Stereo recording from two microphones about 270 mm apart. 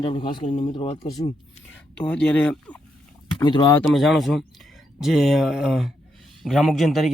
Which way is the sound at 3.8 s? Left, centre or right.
Centre.